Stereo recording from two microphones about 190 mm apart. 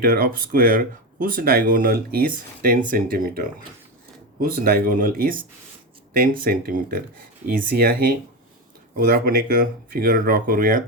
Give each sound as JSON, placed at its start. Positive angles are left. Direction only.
{"t": 0.0, "sound": "speech", "side_deg": -55}
{"t": 6.4, "sound": "speech", "side_deg": -50}